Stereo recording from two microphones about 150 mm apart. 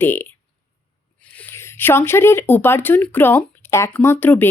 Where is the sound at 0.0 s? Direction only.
15° left (ahead or behind).